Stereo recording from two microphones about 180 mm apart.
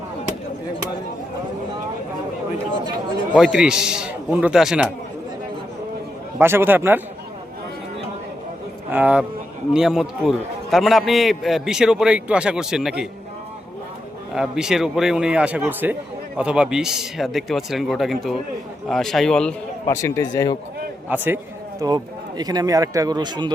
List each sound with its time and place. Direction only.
3.3 s a man's voice: 5° right (ahead or behind)
6.4 s a man's voice: 15° right (ahead or behind)
8.9 s a man's voice: 10° right (ahead or behind)
14.3 s a man's voice: 5° right (ahead or behind)
19.9 s speech: 15° left (ahead or behind)
21.1 s a man's voice: 10° right (ahead or behind)
21.8 s speech: 20° right (ahead or behind)